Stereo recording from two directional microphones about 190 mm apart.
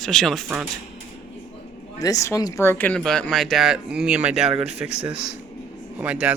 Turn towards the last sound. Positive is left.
turn(degrees=-5)  # may be behind; listen again after turning